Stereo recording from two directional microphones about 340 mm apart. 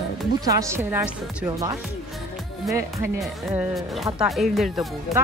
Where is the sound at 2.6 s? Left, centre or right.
Centre.